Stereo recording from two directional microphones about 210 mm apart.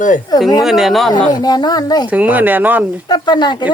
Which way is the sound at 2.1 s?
5° right (ahead or behind).